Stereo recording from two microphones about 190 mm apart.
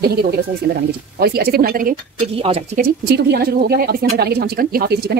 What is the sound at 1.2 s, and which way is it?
Speech, 55° right (ahead or behind).